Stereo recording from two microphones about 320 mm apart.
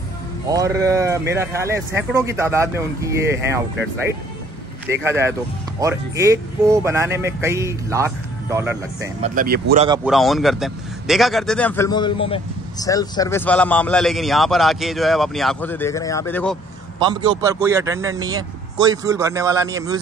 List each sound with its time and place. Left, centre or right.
0.5 s speech: centre
4.8 s speech: centre
9.2 s speech: right
10.0 s speech: centre
17.1 s speech: centre